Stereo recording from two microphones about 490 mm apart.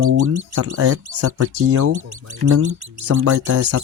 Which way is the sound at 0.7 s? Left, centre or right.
Right.